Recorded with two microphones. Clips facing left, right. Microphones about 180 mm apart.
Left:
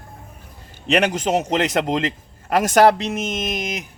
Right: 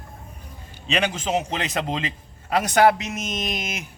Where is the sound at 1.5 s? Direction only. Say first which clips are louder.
Left 7 dB; 75° left (ahead or behind).